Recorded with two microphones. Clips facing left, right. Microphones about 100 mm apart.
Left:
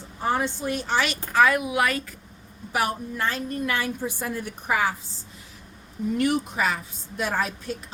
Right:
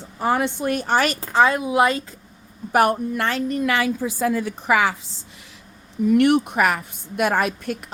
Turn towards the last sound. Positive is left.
turn(degrees=-65)  # may be behind; listen again after turning